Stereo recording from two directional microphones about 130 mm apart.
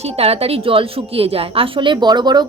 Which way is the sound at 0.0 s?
50° right (ahead or behind).